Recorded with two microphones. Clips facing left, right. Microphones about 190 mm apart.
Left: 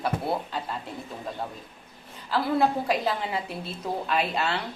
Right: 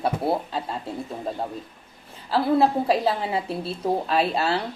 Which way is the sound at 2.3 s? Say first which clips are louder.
Right 4 dB; 30° right (ahead or behind).